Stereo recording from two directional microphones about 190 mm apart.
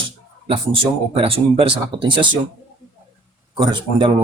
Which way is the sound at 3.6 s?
25° right (ahead or behind).